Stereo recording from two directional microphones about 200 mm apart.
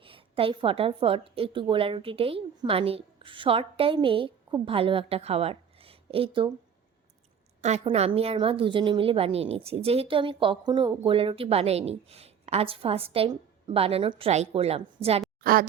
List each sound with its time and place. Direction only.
0.0 s a woman's voice: 25° right (ahead or behind)
7.6 s a woman's voice: 35° right (ahead or behind)
15.4 s a sound: 45° right (ahead or behind)